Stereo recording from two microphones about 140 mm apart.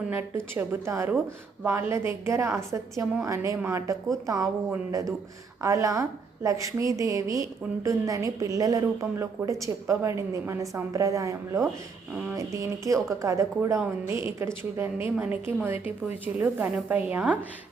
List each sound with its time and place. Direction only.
0.1 s a woman's voice: 15° right (ahead or behind)
5.6 s a woman's voice: 20° right (ahead or behind)